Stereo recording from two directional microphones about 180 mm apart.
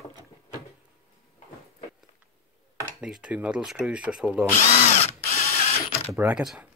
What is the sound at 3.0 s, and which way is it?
Speech, 5° right (ahead or behind).